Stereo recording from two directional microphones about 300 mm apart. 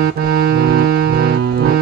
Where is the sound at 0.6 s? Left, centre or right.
Right.